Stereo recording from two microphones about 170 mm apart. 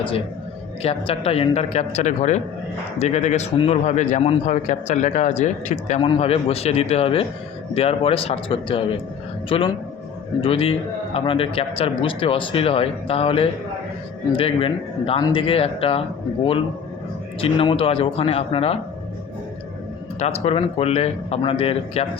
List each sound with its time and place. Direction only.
0.8 s a man's voice: 35° left (ahead or behind)
6.0 s speech: 35° left (ahead or behind)
20.1 s speech: 40° left (ahead or behind)